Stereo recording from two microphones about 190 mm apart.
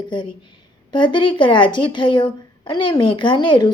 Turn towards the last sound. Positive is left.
turn(degrees=25)  # may be behind; listen again after turning